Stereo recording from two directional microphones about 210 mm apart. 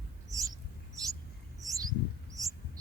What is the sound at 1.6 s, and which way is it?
Bird, 15° right (ahead or behind).